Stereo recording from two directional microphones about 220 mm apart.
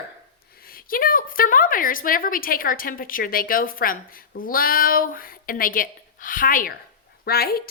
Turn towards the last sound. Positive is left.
turn(degrees=45)  # may be behind; listen again after turning